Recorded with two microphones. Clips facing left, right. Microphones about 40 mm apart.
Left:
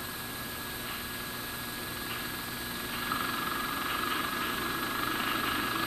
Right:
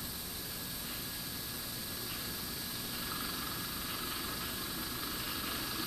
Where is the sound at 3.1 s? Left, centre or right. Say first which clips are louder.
Left 11 dB; left.